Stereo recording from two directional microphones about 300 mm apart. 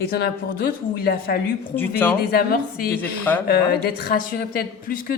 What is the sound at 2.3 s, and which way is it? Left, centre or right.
Speech, left.